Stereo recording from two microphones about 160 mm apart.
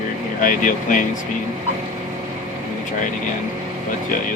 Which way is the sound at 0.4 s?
55° left (ahead or behind).